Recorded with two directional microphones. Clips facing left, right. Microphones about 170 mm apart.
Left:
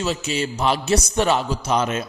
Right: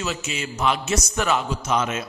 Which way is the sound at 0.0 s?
30° left (ahead or behind).